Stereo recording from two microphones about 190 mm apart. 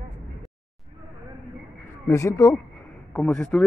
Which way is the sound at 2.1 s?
15° left (ahead or behind).